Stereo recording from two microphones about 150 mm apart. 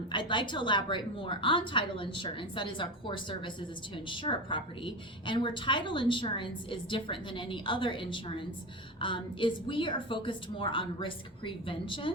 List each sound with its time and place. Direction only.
0.1 s a woman's voice: 30° left (ahead or behind)